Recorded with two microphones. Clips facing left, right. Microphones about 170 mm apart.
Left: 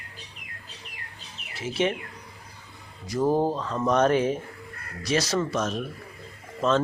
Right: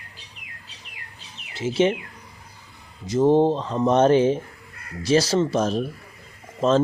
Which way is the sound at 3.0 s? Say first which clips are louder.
Right 6 dB; 20° right (ahead or behind).